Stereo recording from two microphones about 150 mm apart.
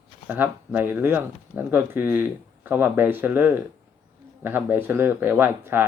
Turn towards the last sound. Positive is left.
turn(degrees=-15)  # may be behind; listen again after turning